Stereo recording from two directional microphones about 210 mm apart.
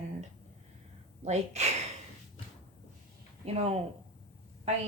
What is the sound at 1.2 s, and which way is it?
Speech, 30° right (ahead or behind).